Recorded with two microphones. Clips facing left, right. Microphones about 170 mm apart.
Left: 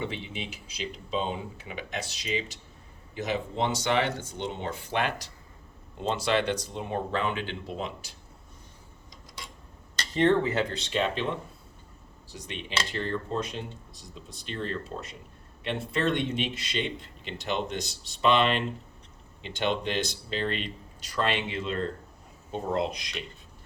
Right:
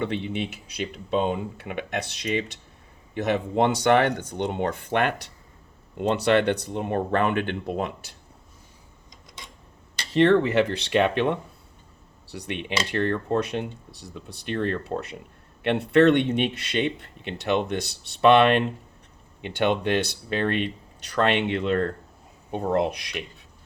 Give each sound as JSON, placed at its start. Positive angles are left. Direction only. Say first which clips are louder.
{"t": 0.0, "sound": "speech", "louder": "right 7 dB", "side_deg": -60}
{"t": 10.2, "sound": "speech", "louder": "right 5 dB", "side_deg": -75}